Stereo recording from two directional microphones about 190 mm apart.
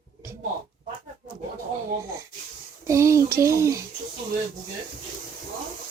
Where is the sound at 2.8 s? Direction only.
15° right (ahead or behind).